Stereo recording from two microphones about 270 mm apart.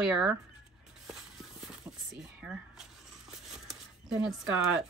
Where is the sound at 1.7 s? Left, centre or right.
Centre.